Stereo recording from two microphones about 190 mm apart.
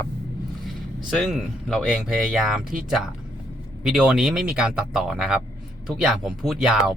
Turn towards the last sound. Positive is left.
turn(degrees=0)  # may be behind; listen again after turning